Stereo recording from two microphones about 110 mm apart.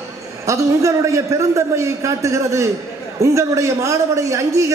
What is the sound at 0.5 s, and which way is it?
A man's voice, 30° right (ahead or behind).